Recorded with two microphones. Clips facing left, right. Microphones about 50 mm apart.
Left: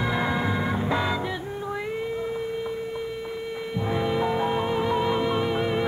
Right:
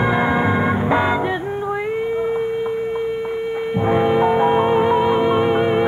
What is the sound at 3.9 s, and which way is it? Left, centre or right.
Music, right.